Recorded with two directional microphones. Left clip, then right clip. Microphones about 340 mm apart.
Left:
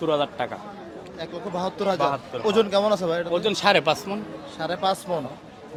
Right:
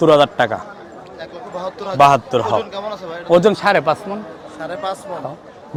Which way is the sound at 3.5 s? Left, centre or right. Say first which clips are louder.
Right 5 dB; centre.